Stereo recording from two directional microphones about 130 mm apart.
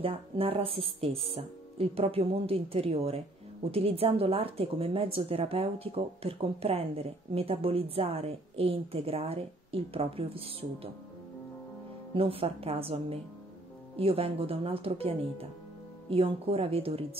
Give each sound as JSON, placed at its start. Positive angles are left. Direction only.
{"t": 0.0, "sound": "speech", "side_deg": -45}
{"t": 12.1, "sound": "speech", "side_deg": -45}